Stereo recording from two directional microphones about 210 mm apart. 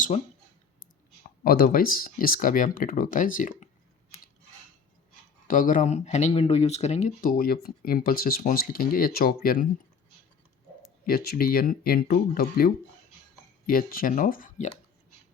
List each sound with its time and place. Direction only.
1.5 s speech: 45° left (ahead or behind)
5.5 s speech: 40° left (ahead or behind)
11.0 s speech: 45° left (ahead or behind)